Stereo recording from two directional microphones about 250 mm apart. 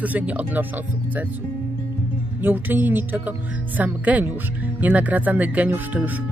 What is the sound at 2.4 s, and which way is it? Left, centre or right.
Speech, centre.